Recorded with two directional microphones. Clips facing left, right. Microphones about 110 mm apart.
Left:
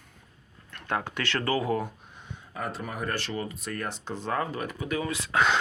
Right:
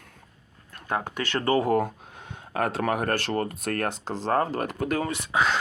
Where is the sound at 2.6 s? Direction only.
70° right (ahead or behind); by 4.3 s 90° right.